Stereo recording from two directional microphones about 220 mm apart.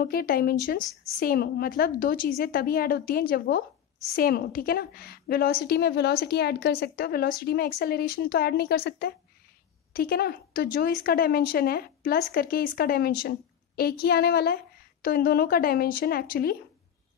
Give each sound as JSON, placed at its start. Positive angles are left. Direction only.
{"t": 0.0, "sound": "a woman's voice", "side_deg": 45}